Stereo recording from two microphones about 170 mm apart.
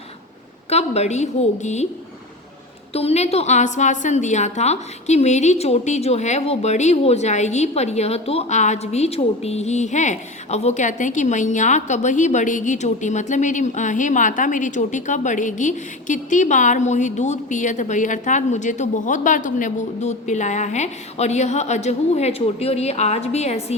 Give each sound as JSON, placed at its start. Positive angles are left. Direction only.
{"t": 0.7, "sound": "a woman's voice", "side_deg": 40}
{"t": 2.9, "sound": "a woman's voice", "side_deg": 35}